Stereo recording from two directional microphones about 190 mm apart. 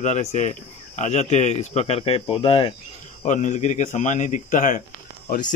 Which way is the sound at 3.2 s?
40° left (ahead or behind).